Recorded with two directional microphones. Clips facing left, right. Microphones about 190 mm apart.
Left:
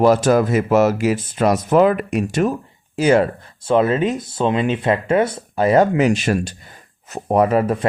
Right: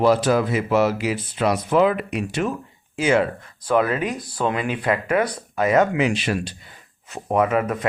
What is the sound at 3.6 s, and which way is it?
Speech, 25° left (ahead or behind).